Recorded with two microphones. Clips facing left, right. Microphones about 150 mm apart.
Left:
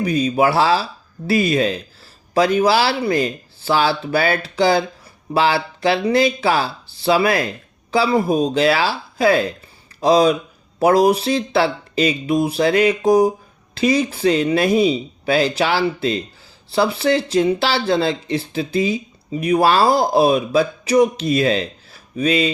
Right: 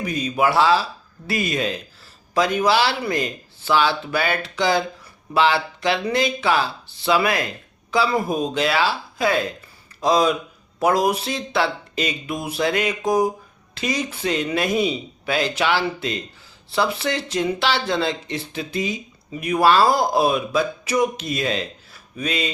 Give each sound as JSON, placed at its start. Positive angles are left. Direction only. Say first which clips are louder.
{"t": 0.0, "sound": "speech", "louder": "left 5 dB", "side_deg": 35}